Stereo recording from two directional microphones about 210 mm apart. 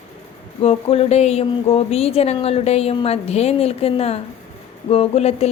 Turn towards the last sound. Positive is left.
turn(degrees=30)  # may be behind; listen again after turning